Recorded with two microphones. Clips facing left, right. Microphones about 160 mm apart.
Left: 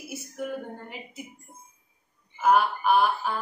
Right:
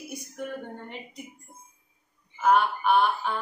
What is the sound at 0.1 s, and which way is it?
A woman's voice, 5° left (ahead or behind).